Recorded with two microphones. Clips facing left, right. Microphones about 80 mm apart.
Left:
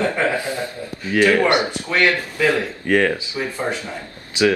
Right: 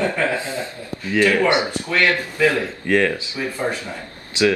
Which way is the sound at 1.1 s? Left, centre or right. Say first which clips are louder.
Left 1 dB; centre.